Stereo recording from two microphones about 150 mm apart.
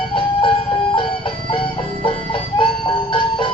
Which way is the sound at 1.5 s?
35° left (ahead or behind).